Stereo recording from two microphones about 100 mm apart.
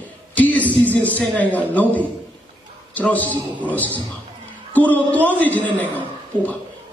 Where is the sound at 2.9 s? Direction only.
15° left (ahead or behind).